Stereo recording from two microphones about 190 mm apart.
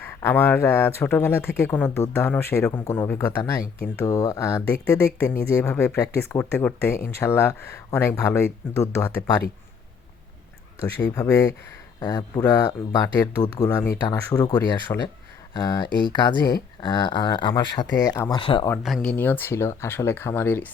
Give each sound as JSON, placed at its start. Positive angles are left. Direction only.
{"t": 0.0, "sound": "speech", "side_deg": 10}
{"t": 11.1, "sound": "speech", "side_deg": 15}
{"t": 18.8, "sound": "speech", "side_deg": 0}
{"t": 19.1, "sound": "speech", "side_deg": 10}